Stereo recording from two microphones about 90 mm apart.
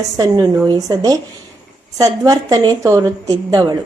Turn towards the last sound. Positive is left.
turn(degrees=-45)  # may be behind; listen again after turning